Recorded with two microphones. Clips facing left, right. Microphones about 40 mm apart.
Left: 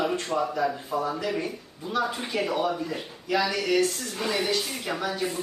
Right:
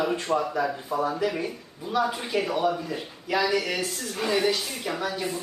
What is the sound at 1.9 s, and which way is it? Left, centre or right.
Speech, centre.